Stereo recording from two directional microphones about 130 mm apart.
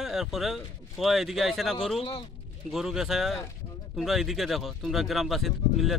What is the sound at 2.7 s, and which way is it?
Speech, 5° right (ahead or behind).